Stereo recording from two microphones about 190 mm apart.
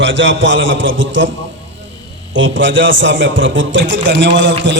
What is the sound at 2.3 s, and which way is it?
A man's voice, 80° right.